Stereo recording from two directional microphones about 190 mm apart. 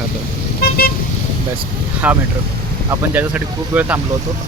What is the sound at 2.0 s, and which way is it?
Speech, 10° right (ahead or behind).